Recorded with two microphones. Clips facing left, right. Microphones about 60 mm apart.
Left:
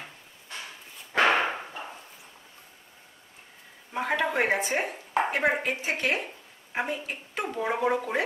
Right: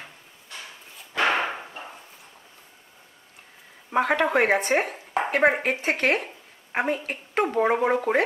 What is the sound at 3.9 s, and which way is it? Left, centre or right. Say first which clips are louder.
A woman's voice: right 6 dB; right.